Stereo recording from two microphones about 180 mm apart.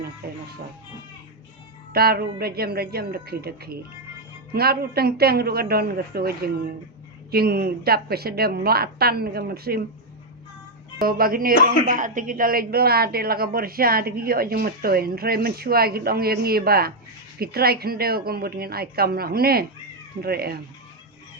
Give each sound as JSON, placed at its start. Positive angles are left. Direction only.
{"t": 1.9, "sound": "speech", "side_deg": -60}
{"t": 11.0, "sound": "speech", "side_deg": -55}